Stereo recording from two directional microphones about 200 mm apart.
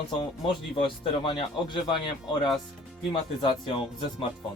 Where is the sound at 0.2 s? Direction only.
25° left (ahead or behind).